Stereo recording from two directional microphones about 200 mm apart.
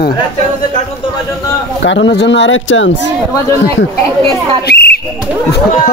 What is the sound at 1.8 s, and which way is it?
Speech, 65° left (ahead or behind).